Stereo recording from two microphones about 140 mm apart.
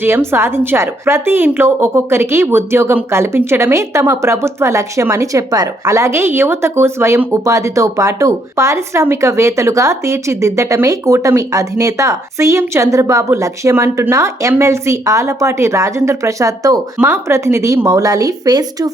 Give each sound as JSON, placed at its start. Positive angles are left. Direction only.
{"t": 0.0, "sound": "a woman's voice", "side_deg": -20}